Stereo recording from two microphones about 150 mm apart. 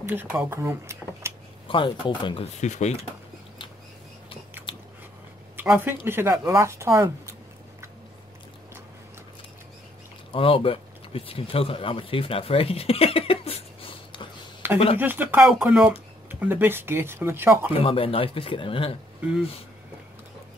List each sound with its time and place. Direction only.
0.0 s speech: 10° right (ahead or behind)
1.7 s speech: 35° left (ahead or behind)
2.6 s speech: 50° left (ahead or behind)
4.7 s biting: 35° left (ahead or behind)
5.6 s a sound: 15° right (ahead or behind)
6.0 s speech: 15° right (ahead or behind)
10.3 s speech: 35° left (ahead or behind)
14.6 s speech: 15° right (ahead or behind)
17.7 s speech: 40° left (ahead or behind)